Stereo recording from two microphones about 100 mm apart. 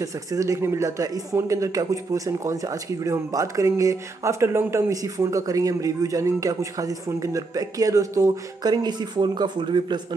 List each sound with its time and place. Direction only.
0.0 s speech: 35° right (ahead or behind); by 9.9 s 50° right (ahead or behind)